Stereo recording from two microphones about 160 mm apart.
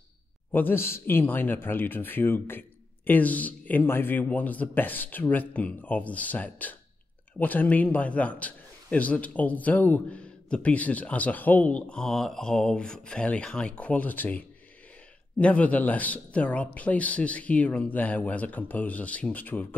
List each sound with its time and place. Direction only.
0.5 s a man's voice: 10° left (ahead or behind)